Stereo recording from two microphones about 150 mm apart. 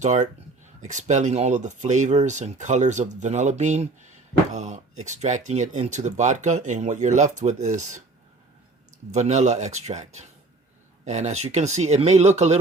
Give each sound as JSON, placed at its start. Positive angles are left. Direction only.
{"t": 0.0, "sound": "speech", "side_deg": -50}
{"t": 9.1, "sound": "speech", "side_deg": -50}